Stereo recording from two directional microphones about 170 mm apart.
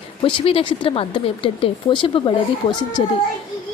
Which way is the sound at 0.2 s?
30° left (ahead or behind).